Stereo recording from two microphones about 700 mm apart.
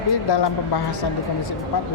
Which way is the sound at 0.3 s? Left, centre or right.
Left.